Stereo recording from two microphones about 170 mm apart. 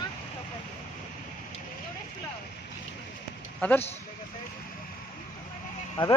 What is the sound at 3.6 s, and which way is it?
Speech, 10° left (ahead or behind).